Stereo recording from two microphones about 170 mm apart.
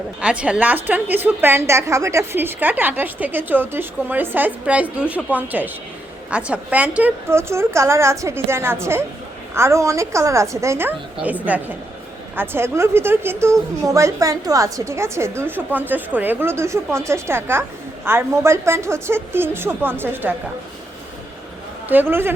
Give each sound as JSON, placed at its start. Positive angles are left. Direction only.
{"t": 0.2, "sound": "a woman's voice", "side_deg": -5}
{"t": 21.8, "sound": "a woman's voice", "side_deg": -10}